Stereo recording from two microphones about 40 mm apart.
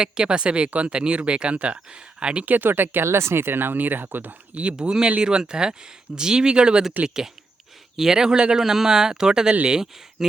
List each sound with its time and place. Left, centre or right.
0.0 s speech: right
2.5 s speech: right
4.8 s speech: centre
7.9 s speech: centre